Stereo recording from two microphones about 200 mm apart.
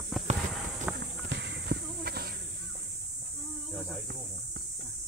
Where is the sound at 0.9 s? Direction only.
55° right (ahead or behind).